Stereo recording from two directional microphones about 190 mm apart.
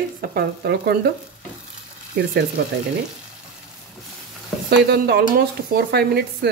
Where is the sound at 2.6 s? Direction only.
55° right (ahead or behind).